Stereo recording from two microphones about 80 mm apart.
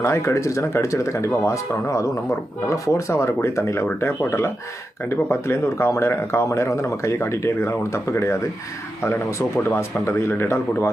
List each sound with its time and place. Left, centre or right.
0.0 s speech: left